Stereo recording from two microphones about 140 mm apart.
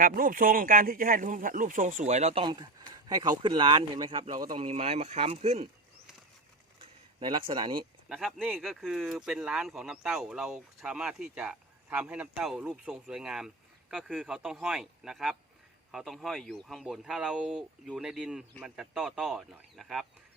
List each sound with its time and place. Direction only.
0.0 s speech: 85° right; by 2.4 s 50° right (ahead or behind)
2.4 s speech: 30° right (ahead or behind)
4.5 s speech: 50° right (ahead or behind)
7.2 s speech: 35° right (ahead or behind)
8.1 s speech: 10° right (ahead or behind)